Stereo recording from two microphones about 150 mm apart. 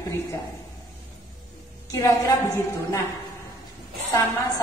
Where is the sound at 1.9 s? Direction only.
20° left (ahead or behind).